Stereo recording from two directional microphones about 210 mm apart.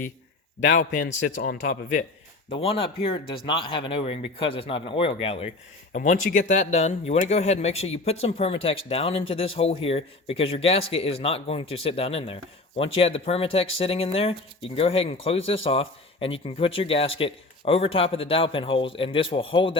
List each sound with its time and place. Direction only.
0.8 s speech: 40° left (ahead or behind)
1.0 s a man's voice: 55° left (ahead or behind)
2.5 s speech: 25° left (ahead or behind)
5.9 s speech: 40° left (ahead or behind)